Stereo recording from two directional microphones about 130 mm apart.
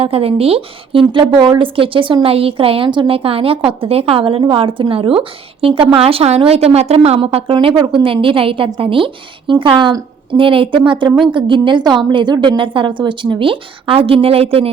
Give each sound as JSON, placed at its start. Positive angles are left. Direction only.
{"t": 0.0, "sound": "a woman's voice", "side_deg": -50}